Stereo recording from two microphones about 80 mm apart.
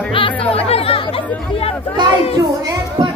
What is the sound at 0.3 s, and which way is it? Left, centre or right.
Speech, centre.